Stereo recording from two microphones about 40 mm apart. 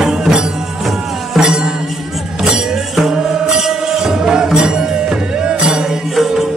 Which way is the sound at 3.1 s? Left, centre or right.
Centre.